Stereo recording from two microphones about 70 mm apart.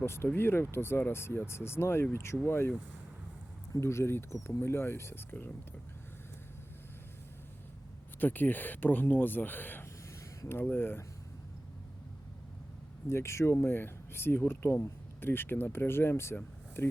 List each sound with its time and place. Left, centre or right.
0.0 s speech: left
3.8 s speech: left
8.2 s speech: left
13.1 s speech: left